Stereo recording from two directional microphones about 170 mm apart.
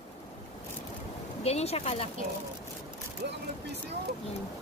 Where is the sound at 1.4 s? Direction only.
40° left (ahead or behind).